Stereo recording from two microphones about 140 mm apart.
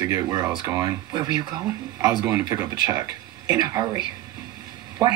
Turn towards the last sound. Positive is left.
turn(degrees=-25)  # may be behind; listen again after turning